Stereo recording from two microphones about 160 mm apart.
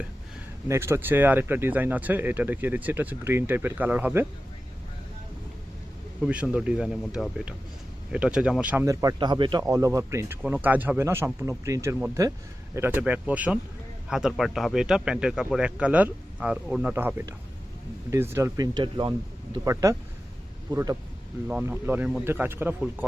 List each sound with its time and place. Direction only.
0.7 s speech: 15° right (ahead or behind)
6.2 s speech: 10° right (ahead or behind)